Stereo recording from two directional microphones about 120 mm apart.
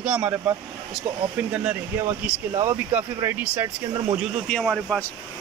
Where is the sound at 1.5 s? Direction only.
10° right (ahead or behind).